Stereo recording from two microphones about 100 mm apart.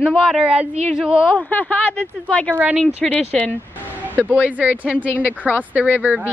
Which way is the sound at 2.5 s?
15° right (ahead or behind).